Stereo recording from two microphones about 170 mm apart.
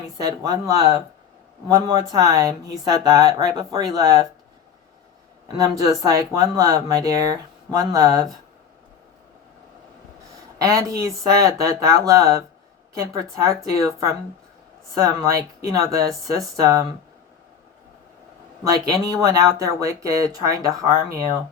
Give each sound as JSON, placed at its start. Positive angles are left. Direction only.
{"t": 0.2, "sound": "speech", "side_deg": -20}
{"t": 5.5, "sound": "speech", "side_deg": -20}
{"t": 10.6, "sound": "a woman's voice", "side_deg": -20}
{"t": 18.9, "sound": "speech", "side_deg": -20}